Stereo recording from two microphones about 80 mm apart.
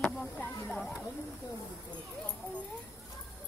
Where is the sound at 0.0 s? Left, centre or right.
Centre.